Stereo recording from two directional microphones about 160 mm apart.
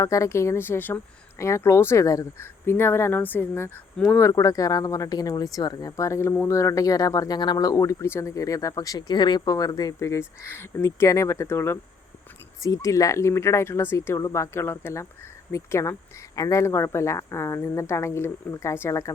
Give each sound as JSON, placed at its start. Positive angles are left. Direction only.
{"t": 0.0, "sound": "a woman's voice", "side_deg": 20}